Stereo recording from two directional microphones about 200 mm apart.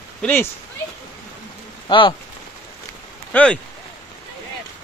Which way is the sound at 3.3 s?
5° left (ahead or behind).